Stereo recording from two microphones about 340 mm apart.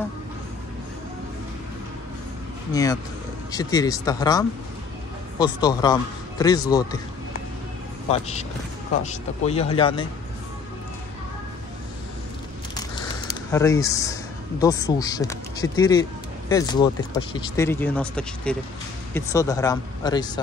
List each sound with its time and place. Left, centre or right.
2.7 s speech: centre
8.1 s speech: centre
12.7 s a sound: centre
14.6 s speech: centre